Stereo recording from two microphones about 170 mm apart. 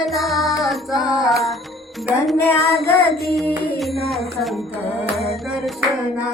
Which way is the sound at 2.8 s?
Centre (ahead or behind).